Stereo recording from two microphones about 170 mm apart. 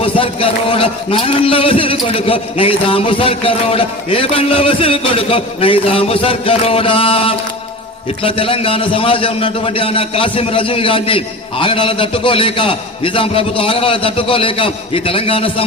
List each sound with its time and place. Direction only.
0.0 s a man's voice: 35° left (ahead or behind)